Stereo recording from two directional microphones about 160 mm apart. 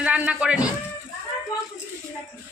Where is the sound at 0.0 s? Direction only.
5° right (ahead or behind).